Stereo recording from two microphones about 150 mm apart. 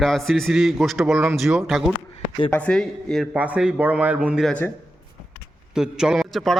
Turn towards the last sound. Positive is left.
turn(degrees=0)  # may be behind; listen again after turning